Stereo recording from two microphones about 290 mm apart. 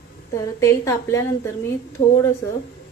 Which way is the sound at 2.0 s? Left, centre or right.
Left.